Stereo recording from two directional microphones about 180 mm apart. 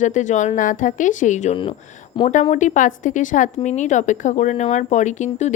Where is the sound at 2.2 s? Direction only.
25° left (ahead or behind).